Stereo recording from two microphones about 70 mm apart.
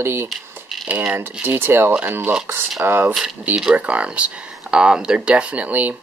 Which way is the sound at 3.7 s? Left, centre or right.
Centre.